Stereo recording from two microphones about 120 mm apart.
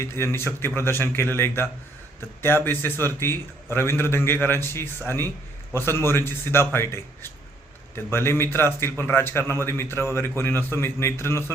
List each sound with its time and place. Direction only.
0.0 s a man's voice: 20° left (ahead or behind)